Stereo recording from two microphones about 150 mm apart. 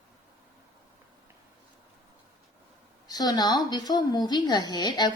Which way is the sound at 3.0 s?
25° left (ahead or behind).